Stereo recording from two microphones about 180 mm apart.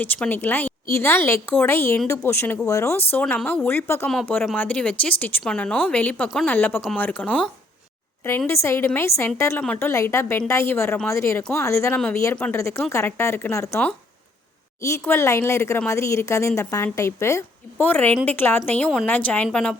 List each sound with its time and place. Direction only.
0.0 s speech: 10° left (ahead or behind)
14.8 s a woman's voice: 15° left (ahead or behind)